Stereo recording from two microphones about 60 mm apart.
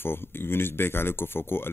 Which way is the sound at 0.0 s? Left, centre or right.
Left.